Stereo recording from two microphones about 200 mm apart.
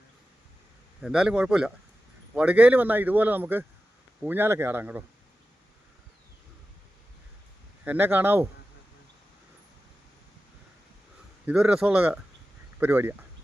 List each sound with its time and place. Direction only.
1.0 s a man's voice: 5° right (ahead or behind)
7.9 s a man's voice: 10° right (ahead or behind)
11.4 s a man's voice: 5° right (ahead or behind)